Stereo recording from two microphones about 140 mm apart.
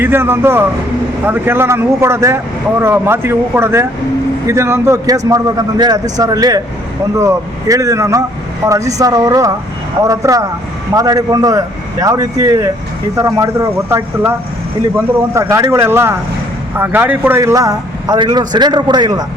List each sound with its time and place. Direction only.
0.0 s speech: 15° right (ahead or behind)